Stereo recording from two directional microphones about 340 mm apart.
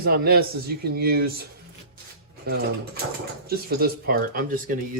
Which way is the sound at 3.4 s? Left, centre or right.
Right.